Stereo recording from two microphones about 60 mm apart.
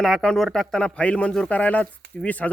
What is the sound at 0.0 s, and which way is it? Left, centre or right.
Speech, centre.